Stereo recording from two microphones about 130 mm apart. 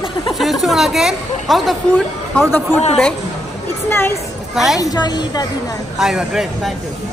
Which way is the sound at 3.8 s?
15° left (ahead or behind).